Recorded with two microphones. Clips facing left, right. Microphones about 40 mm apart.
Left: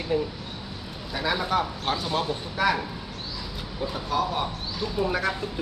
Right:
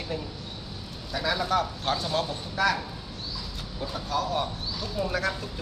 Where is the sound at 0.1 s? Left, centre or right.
Left.